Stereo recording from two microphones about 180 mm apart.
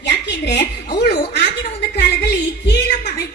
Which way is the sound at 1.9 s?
65° left (ahead or behind).